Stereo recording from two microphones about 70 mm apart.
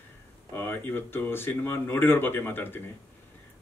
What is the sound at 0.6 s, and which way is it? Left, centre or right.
A man's voice, left.